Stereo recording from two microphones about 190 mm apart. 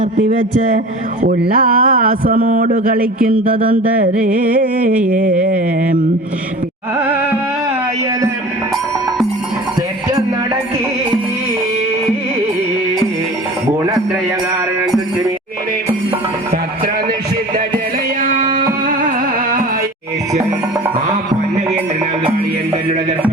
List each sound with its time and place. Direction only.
0.0 s a sound: 35° right (ahead or behind)
1.4 s mantra: 50° right (ahead or behind)
3.4 s speech: 30° right (ahead or behind)
5.0 s mantra: 45° right (ahead or behind)
7.0 s music: 10° right (ahead or behind)
13.7 s music: 20° right (ahead or behind)
18.2 s music: 45° right (ahead or behind)